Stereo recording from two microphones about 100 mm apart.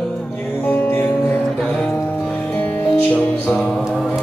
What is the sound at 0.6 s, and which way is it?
Music, 15° left (ahead or behind).